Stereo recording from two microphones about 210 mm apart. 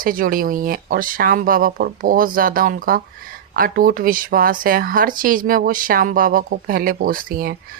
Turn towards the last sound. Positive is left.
turn(degrees=-45)  # may be behind; listen again after turning